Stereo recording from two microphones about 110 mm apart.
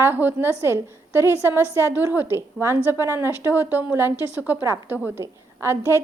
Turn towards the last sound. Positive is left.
turn(degrees=-20)  # may be behind; listen again after turning